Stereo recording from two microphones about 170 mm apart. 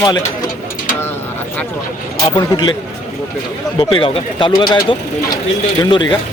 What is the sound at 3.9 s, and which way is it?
Speech, 30° left (ahead or behind).